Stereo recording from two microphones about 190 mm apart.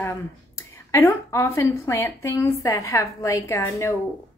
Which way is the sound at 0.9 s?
15° left (ahead or behind).